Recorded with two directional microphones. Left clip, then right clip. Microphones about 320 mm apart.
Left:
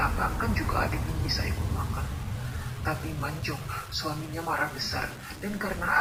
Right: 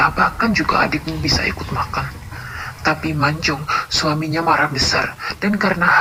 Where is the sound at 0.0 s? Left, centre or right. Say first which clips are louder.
Right 13 dB; right.